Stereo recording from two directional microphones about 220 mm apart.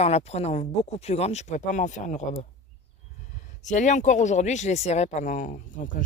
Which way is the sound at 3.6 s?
35° left (ahead or behind).